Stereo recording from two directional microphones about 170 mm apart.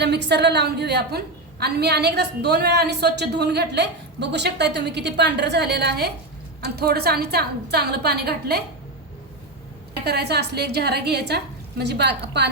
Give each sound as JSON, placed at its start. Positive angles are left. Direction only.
{"t": 0.0, "sound": "a woman's voice", "side_deg": -80}
{"t": 10.0, "sound": "a woman's voice", "side_deg": -75}